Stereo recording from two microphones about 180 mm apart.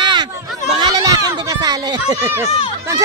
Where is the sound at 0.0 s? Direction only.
25° right (ahead or behind).